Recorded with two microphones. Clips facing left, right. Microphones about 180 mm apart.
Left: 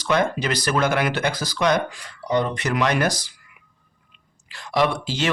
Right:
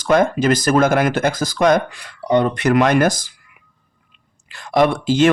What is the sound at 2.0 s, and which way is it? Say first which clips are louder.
Speech: right 6 dB; 65° right (ahead or behind).